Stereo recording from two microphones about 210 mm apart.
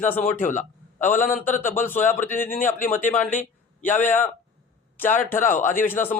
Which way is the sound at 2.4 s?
40° left (ahead or behind).